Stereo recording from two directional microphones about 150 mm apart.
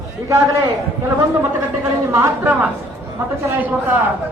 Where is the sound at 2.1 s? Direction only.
15° right (ahead or behind).